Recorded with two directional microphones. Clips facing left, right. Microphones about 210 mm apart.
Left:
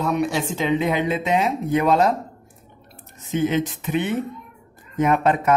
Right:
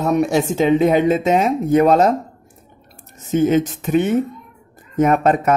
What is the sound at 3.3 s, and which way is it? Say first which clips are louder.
A man's voice: right 6 dB; 45° right (ahead or behind).